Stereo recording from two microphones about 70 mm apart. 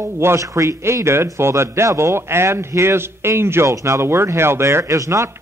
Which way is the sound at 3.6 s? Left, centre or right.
Right.